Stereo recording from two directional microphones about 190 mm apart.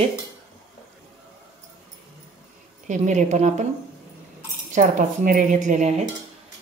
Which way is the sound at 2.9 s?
40° right (ahead or behind).